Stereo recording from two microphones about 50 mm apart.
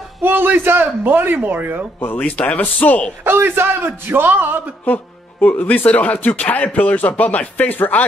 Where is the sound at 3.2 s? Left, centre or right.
Right.